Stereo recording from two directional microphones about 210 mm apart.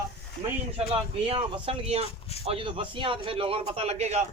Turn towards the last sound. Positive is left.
turn(degrees=-30)  # may be behind; listen again after turning